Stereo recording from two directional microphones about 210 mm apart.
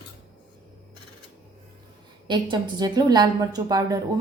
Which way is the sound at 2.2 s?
20° right (ahead or behind).